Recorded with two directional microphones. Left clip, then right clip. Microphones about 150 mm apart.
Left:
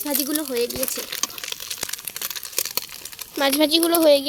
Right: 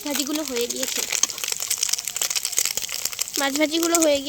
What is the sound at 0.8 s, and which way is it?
Crumpling, centre (ahead or behind).